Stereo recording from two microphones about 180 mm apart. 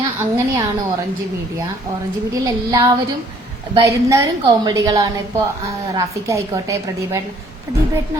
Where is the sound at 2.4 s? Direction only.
20° right (ahead or behind).